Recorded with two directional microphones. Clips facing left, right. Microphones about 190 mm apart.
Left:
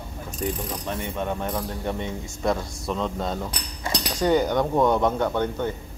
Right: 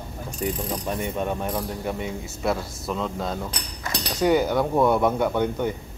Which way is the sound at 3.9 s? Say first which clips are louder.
Left 3 dB; 30° left (ahead or behind).